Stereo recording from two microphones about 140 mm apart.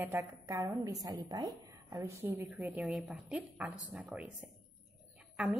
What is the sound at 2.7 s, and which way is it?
A woman's voice, centre (ahead or behind).